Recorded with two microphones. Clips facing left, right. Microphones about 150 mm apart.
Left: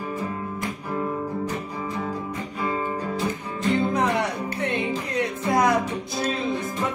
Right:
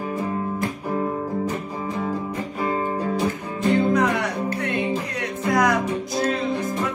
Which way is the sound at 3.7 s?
30° left (ahead or behind).